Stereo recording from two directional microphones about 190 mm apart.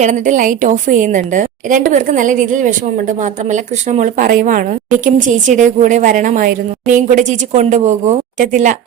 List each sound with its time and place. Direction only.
0.0 s a woman's voice: 40° right (ahead or behind)